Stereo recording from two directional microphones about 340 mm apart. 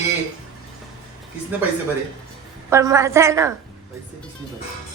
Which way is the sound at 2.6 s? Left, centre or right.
Centre.